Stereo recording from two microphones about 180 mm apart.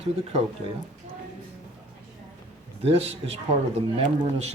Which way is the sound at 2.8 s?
35° right (ahead or behind).